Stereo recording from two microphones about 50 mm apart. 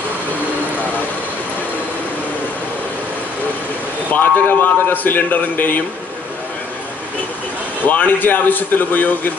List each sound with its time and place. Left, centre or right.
4.1 s a man's voice: left
7.8 s a man's voice: left